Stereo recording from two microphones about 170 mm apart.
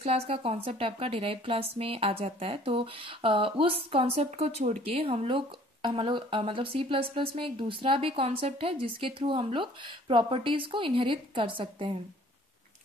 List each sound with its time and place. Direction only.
0.0 s a woman's voice: 35° right (ahead or behind)